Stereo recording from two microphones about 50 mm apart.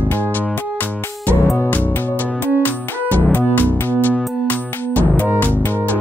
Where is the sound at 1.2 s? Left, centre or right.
Left.